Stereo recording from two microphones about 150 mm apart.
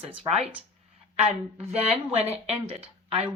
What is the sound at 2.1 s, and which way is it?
A woman's voice, 40° right (ahead or behind).